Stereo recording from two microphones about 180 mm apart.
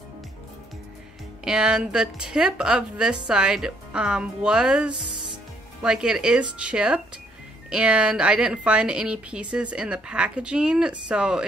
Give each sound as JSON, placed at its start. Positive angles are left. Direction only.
{"t": 1.4, "sound": "a woman's voice", "side_deg": -5}
{"t": 5.1, "sound": "music", "side_deg": -25}
{"t": 5.8, "sound": "a woman's voice", "side_deg": -5}